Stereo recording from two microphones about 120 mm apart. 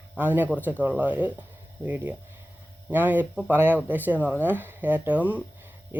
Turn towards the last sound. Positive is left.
turn(degrees=-15)  # may be behind; listen again after turning